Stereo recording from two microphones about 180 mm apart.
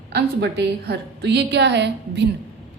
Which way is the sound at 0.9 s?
70° right (ahead or behind).